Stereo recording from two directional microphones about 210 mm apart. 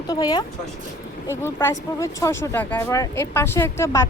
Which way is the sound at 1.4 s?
15° left (ahead or behind).